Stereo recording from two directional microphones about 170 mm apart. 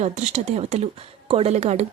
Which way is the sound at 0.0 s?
45° right (ahead or behind).